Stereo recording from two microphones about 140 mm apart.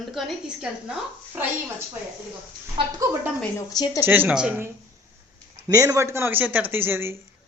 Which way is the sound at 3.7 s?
30° left (ahead or behind).